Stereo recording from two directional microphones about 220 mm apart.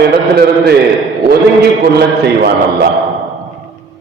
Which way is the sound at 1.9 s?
45° right (ahead or behind).